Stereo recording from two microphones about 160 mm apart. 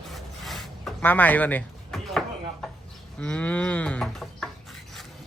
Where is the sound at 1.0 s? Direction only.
10° left (ahead or behind).